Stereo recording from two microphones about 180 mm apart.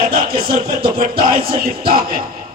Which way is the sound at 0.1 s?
55° right (ahead or behind).